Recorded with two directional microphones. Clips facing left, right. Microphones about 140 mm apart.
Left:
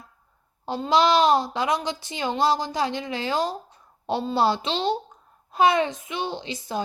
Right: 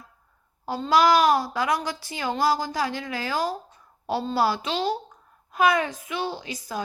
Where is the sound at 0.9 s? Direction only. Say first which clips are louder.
Even; 25° left (ahead or behind).